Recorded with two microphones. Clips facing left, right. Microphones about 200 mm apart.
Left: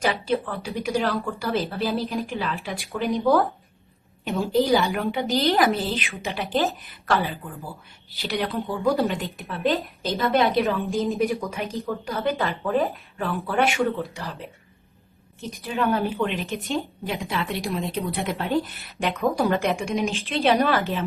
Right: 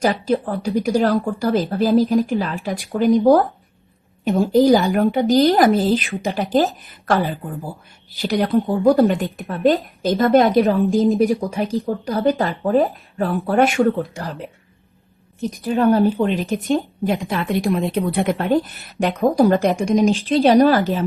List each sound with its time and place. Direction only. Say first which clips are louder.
0.0 s a woman's voice: right 5 dB; 40° right (ahead or behind)
4.3 s a woman's voice: right 7 dB; 45° right (ahead or behind)
15.4 s a woman's voice: right 8 dB; 40° right (ahead or behind)
16.7 s a woman's voice: right 8 dB; 50° right (ahead or behind)